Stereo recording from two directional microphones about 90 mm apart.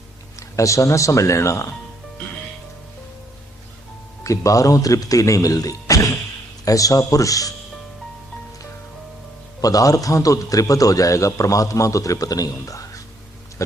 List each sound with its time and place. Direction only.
0.3 s a man's voice: 35° left (ahead or behind)
4.2 s a man's voice: 35° left (ahead or behind)
9.6 s a man's voice: 40° left (ahead or behind)